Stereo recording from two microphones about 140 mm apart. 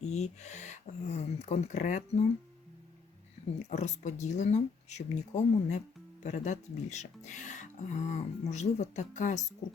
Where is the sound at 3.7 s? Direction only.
60° left (ahead or behind).